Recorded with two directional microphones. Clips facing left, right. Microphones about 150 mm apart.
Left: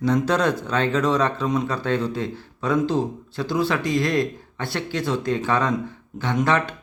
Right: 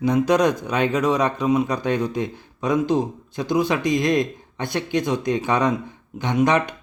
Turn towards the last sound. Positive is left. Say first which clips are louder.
# right 2 dB
turn(degrees=-15)  # may be behind; listen again after turning